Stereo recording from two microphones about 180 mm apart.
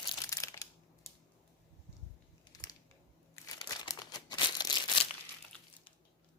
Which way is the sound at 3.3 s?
20° left (ahead or behind).